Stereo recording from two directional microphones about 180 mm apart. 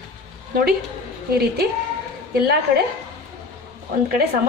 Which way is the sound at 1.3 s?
60° right (ahead or behind).